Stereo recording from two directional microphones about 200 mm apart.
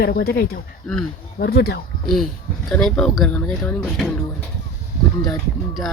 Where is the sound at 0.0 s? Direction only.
50° left (ahead or behind).